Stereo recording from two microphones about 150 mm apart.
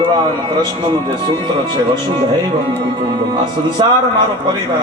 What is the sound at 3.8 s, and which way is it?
Speech, 35° right (ahead or behind).